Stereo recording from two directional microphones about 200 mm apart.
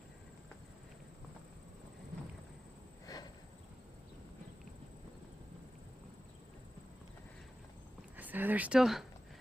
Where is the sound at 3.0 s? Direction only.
20° left (ahead or behind).